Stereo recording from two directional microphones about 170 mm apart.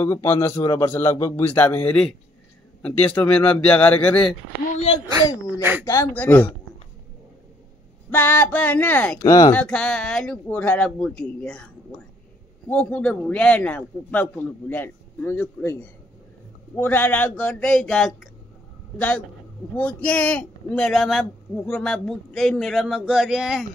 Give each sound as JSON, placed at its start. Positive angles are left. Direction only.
{"t": 0.0, "sound": "a man's voice", "side_deg": 15}
{"t": 4.7, "sound": "a sound", "side_deg": 35}
{"t": 5.1, "sound": "speech", "side_deg": -15}
{"t": 5.9, "sound": "a man's voice", "side_deg": 15}
{"t": 8.1, "sound": "a man's voice", "side_deg": 10}
{"t": 9.2, "sound": "speech", "side_deg": 20}
{"t": 9.5, "sound": "a man's voice", "side_deg": 5}